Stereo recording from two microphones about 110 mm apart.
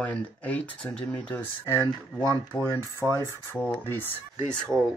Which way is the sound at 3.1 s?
25° left (ahead or behind).